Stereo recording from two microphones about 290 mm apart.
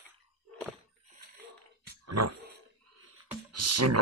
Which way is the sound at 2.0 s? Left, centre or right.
Right.